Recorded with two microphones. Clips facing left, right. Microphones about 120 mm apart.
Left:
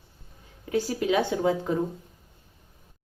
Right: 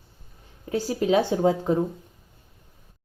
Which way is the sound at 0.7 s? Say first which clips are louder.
Right 3 dB; 35° right (ahead or behind).